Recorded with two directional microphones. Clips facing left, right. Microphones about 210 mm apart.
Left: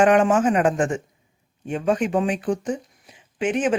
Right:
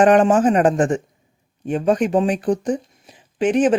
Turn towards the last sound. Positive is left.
turn(degrees=-35)  # may be behind; listen again after turning